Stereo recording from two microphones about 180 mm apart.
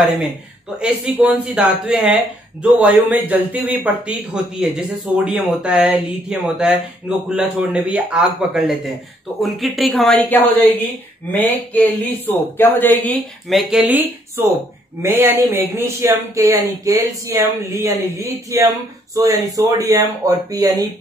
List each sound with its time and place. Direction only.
0.7 s speech: 5° right (ahead or behind)